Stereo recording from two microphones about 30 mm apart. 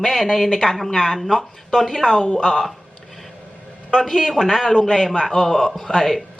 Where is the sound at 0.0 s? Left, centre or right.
Centre.